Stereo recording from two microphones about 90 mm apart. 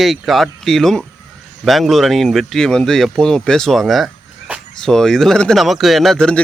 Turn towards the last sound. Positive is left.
turn(degrees=10)  # may be behind; listen again after turning